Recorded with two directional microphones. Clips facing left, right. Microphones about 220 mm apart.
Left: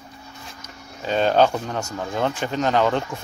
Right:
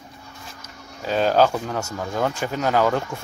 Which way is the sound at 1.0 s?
5° right (ahead or behind).